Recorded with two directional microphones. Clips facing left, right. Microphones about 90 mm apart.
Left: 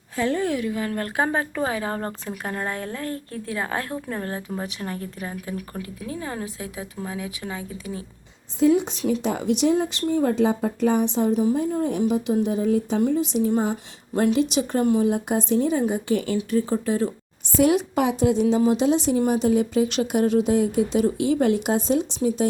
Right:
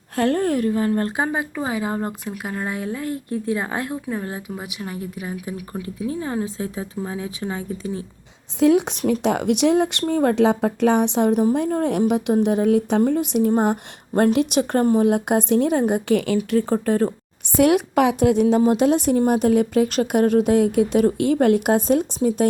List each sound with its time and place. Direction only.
0.2 s a woman's voice: 55° right (ahead or behind)
0.9 s speech: 25° right (ahead or behind)
6.1 s a woman's voice: 25° right (ahead or behind)
8.5 s speech: 75° right (ahead or behind)
13.1 s speech: 60° right (ahead or behind); by 16.7 s 75° right (ahead or behind)
16.7 s a woman's voice: 50° right (ahead or behind)
17.6 s speech: 65° right (ahead or behind)